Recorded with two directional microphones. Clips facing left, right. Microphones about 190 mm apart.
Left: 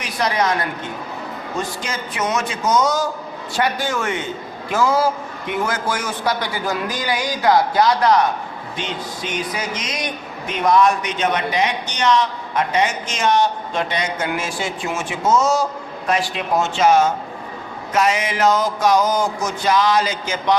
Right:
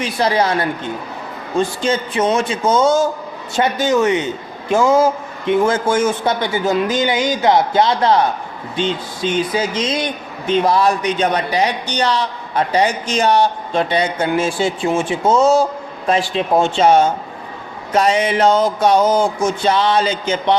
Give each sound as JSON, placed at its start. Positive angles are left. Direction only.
{"t": 0.0, "sound": "a man's voice", "side_deg": -30}